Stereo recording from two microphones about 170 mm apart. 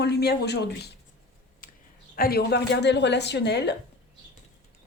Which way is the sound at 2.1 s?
65° left (ahead or behind).